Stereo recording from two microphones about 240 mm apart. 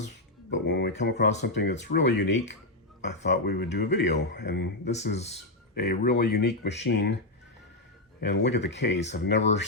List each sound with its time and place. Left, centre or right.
0.5 s speech: left
8.2 s speech: left